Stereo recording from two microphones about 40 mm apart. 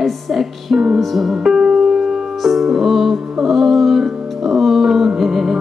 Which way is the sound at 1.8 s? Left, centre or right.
Centre.